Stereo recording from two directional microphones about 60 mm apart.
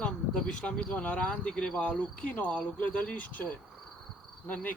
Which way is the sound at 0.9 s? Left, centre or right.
Left.